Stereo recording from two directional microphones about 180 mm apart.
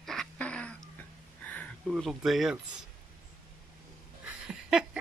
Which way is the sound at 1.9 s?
Centre (ahead or behind).